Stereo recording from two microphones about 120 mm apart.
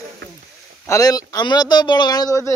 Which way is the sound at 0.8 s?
30° left (ahead or behind).